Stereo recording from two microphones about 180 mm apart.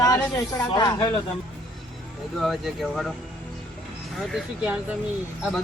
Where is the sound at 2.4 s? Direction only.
Centre (ahead or behind).